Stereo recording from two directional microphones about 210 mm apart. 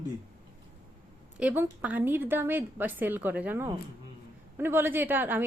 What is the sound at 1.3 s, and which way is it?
A woman's voice, 10° right (ahead or behind).